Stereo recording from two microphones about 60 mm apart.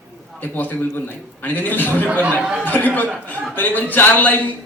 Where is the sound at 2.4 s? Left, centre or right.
Centre.